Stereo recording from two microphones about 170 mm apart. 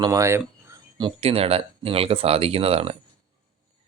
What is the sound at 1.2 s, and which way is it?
Speech, 35° right (ahead or behind).